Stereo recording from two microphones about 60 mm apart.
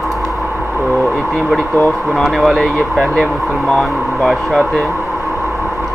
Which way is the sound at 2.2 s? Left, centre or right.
Centre.